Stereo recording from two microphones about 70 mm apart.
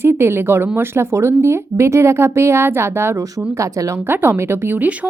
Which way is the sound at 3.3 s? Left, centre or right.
Right.